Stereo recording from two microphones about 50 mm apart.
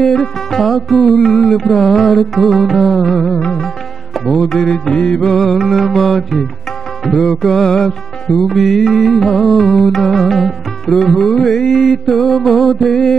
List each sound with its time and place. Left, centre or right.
0.0 s music: centre
3.3 s music: centre
4.3 s music: centre